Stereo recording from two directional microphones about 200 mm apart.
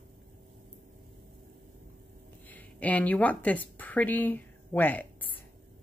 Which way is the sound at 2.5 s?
10° left (ahead or behind).